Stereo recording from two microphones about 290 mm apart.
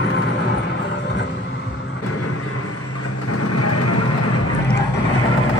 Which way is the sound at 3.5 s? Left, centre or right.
Left.